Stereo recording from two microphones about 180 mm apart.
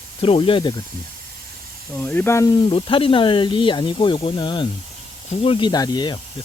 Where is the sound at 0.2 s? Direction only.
30° left (ahead or behind).